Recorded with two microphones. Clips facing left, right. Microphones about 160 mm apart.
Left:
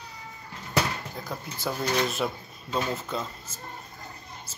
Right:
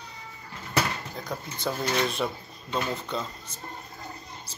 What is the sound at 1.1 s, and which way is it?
Speech, 5° left (ahead or behind).